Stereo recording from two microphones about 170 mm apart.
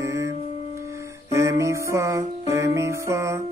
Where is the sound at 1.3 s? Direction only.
15° right (ahead or behind).